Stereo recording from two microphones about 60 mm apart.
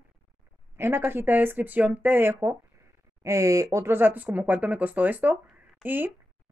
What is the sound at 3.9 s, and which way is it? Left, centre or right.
Speech, right.